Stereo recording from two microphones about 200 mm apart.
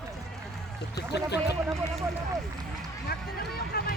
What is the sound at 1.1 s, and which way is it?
Speech, 55° left (ahead or behind).